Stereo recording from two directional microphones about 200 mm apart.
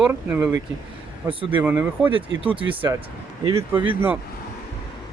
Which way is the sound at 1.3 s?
25° right (ahead or behind).